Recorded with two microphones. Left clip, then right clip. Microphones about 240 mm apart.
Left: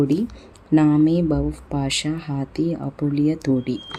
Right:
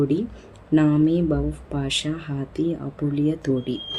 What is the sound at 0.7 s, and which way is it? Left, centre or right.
Speech, left.